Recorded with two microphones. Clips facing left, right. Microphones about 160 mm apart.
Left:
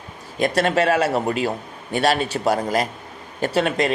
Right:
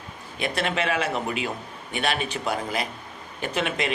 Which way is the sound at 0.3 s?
40° left (ahead or behind).